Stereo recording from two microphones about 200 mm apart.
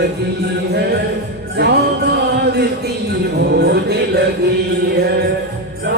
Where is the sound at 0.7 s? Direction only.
55° right (ahead or behind).